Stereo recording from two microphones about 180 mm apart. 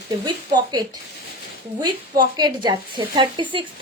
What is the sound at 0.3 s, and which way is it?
Speech, 25° right (ahead or behind).